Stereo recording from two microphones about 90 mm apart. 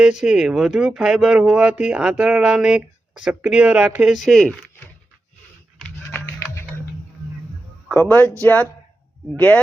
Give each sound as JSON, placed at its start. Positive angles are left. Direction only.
{"t": 0.0, "sound": "speech", "side_deg": -10}
{"t": 6.1, "sound": "music", "side_deg": 25}
{"t": 7.9, "sound": "speech", "side_deg": 20}